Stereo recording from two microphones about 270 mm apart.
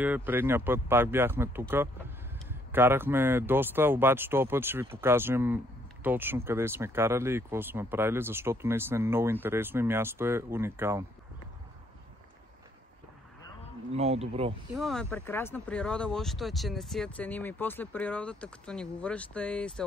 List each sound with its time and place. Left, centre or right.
0.0 s speech: centre
13.9 s speech: right
14.7 s speech: centre